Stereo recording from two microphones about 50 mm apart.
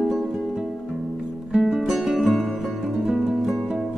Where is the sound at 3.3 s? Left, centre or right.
Centre.